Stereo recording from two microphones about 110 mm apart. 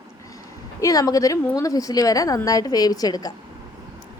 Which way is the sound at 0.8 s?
35° left (ahead or behind).